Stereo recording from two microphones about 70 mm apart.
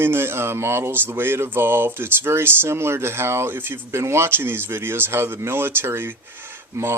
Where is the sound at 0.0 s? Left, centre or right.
Right.